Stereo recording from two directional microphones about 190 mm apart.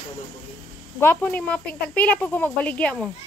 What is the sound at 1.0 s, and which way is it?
Speech, 10° left (ahead or behind).